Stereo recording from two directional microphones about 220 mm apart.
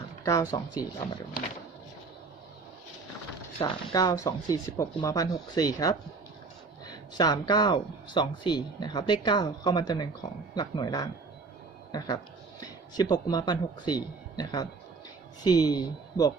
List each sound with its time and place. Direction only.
0.5 s speech: 15° left (ahead or behind)
3.6 s speech: 15° left (ahead or behind)